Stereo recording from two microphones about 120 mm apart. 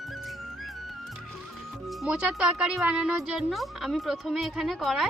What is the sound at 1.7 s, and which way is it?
Speech, centre (ahead or behind).